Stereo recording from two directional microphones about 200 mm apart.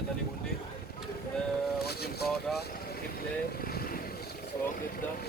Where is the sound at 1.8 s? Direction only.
50° left (ahead or behind).